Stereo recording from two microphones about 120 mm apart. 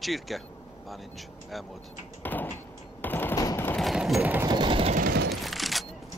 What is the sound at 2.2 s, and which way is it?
Door, 15° left (ahead or behind).